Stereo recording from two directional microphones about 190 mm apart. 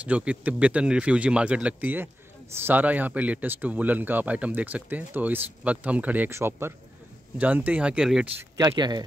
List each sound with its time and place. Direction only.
0.0 s speech: 5° right (ahead or behind)
8.5 s speech: 20° right (ahead or behind)